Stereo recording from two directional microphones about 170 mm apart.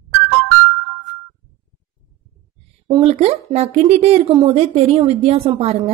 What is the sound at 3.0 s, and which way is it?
Speech, 40° right (ahead or behind).